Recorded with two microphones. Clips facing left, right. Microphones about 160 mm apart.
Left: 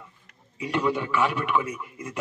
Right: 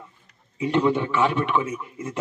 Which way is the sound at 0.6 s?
25° right (ahead or behind).